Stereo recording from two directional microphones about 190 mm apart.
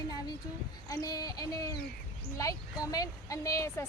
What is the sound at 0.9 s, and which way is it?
Speech, 20° left (ahead or behind).